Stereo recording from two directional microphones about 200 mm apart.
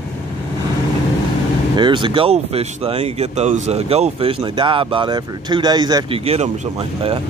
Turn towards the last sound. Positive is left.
turn(degrees=-30)  # may be behind; listen again after turning